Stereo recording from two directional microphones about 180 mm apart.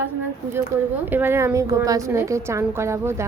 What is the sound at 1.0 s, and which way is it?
A woman's voice, 10° right (ahead or behind).